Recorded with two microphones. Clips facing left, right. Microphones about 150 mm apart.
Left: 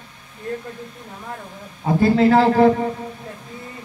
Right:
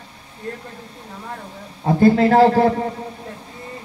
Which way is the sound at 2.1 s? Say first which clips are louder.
Right 1 dB; 40° right (ahead or behind).